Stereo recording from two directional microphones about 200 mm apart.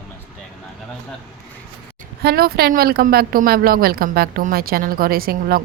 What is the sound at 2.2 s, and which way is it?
A woman's voice, 50° right (ahead or behind).